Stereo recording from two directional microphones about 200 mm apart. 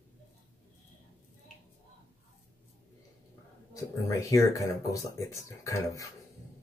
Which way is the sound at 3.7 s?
15° left (ahead or behind).